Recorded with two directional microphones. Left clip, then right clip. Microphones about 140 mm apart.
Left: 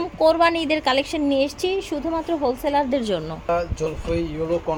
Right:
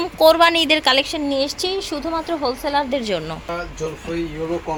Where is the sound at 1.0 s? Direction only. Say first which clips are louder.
Even; 25° left (ahead or behind).